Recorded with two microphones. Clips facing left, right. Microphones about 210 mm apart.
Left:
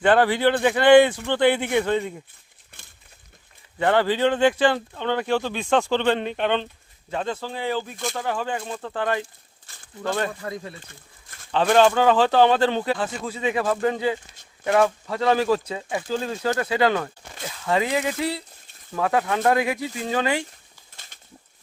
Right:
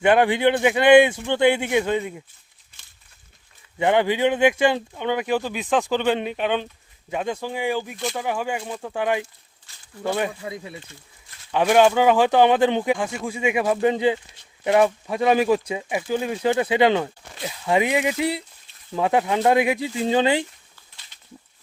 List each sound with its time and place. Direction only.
0.0 s speech: 15° right (ahead or behind)
2.7 s a sound: 60° left (ahead or behind)
3.8 s speech: 15° right (ahead or behind)
9.7 s speech: 55° left (ahead or behind)
10.0 s speech: 15° right (ahead or behind)
20.9 s a sound: 50° left (ahead or behind)